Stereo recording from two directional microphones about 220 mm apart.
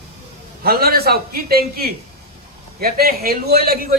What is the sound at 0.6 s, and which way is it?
A man's voice, 45° right (ahead or behind).